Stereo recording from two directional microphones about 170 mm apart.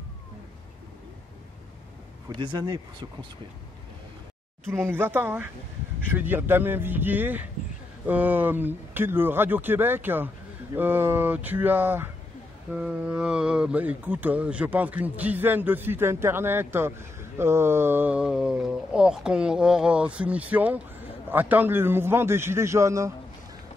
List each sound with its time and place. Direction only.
2.2 s speech: 25° right (ahead or behind)
4.8 s speech: 10° right (ahead or behind)